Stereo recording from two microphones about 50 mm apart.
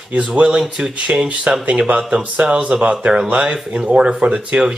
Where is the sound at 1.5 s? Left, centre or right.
Right.